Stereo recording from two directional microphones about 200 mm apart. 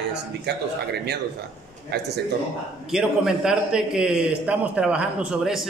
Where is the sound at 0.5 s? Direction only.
55° right (ahead or behind).